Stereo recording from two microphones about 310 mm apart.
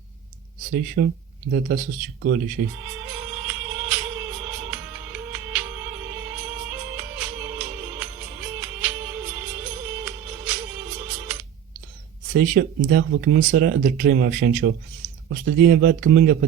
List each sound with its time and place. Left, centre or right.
0.7 s speech: right
2.8 s music: centre
12.3 s speech: right